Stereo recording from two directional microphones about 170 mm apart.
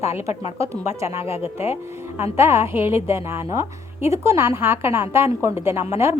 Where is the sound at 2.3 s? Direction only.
15° right (ahead or behind).